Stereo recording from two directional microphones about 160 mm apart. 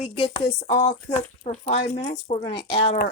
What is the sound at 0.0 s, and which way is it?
Speech, 30° left (ahead or behind).